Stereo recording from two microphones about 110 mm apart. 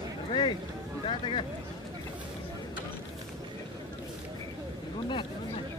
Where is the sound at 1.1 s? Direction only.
50° left (ahead or behind).